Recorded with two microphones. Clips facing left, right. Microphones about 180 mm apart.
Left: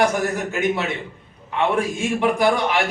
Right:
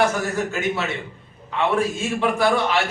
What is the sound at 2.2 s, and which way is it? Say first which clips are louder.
Speech: left 1 dB; 15° left (ahead or behind).